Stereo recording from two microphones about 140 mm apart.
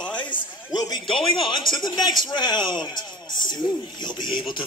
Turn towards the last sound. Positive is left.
turn(degrees=30)  # may be behind; listen again after turning